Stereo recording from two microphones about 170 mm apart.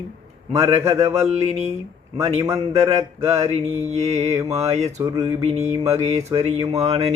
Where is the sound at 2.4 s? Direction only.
15° right (ahead or behind).